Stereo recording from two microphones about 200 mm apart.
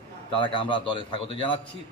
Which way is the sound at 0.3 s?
25° left (ahead or behind).